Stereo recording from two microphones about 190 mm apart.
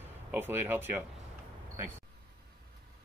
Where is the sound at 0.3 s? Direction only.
10° right (ahead or behind).